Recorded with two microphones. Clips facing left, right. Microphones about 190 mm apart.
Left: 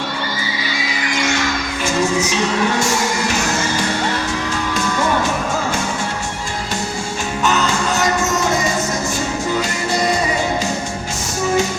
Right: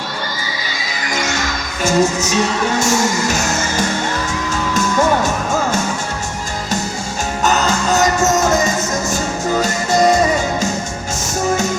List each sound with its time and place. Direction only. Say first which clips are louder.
1.1 s music: left 1 dB; 40° right (ahead or behind)
7.4 s music: right 2 dB; 40° right (ahead or behind)